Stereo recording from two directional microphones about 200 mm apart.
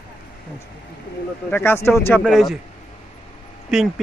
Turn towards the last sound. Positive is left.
turn(degrees=0)  # may be behind; listen again after turning